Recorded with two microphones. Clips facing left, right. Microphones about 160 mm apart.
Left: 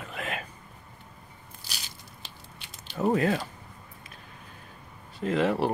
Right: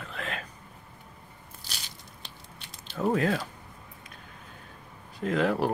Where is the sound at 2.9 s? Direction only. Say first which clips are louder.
Left 1 dB; 5° left (ahead or behind).